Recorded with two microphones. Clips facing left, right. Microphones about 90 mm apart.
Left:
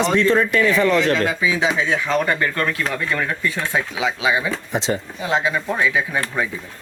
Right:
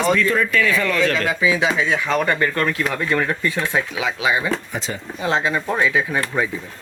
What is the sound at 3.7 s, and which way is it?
Speech, 20° left (ahead or behind).